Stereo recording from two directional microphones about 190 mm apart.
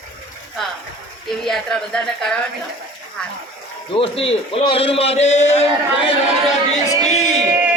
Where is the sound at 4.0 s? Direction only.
30° left (ahead or behind).